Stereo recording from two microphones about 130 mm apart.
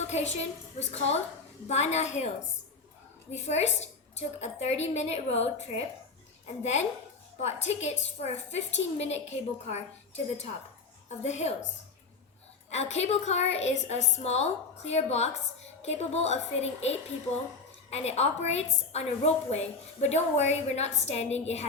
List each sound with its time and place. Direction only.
0.1 s a woman's voice: 55° left (ahead or behind)
3.3 s a woman's voice: 60° left (ahead or behind)
11.2 s a woman's voice: 60° left (ahead or behind)
12.7 s a woman's voice: 55° left (ahead or behind)